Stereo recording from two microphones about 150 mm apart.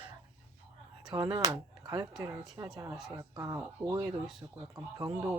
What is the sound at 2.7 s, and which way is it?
Speech, 25° right (ahead or behind).